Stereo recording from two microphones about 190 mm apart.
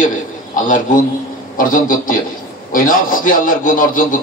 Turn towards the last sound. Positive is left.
turn(degrees=45)  # may be behind; listen again after turning